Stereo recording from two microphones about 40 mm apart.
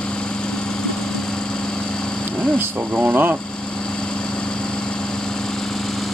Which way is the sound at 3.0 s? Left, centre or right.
Right.